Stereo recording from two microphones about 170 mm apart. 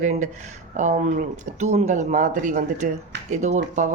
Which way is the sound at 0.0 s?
45° right (ahead or behind).